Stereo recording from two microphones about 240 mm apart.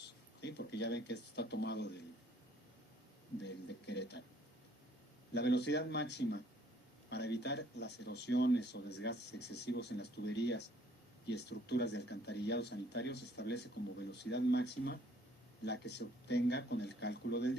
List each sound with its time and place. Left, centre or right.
0.4 s speech: left
3.4 s speech: left
5.3 s speech: left